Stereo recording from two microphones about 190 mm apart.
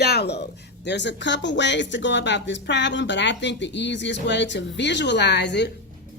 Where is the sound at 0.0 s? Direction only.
60° left (ahead or behind).